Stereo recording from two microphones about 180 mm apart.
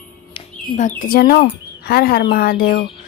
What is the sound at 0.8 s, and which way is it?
A woman's voice, 45° left (ahead or behind).